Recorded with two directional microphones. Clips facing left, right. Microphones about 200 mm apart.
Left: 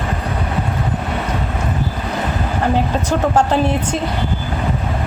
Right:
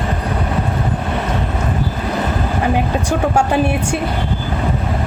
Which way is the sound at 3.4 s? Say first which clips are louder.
Even; 10° right (ahead or behind).